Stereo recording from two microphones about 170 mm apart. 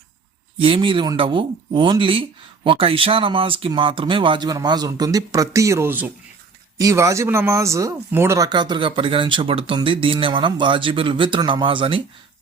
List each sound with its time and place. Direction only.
0.6 s speech: 30° right (ahead or behind)